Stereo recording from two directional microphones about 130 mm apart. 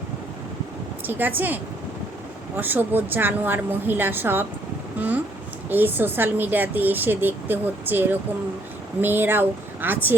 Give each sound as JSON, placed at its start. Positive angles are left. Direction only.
{"t": 1.0, "sound": "speech", "side_deg": -15}
{"t": 2.6, "sound": "speech", "side_deg": -15}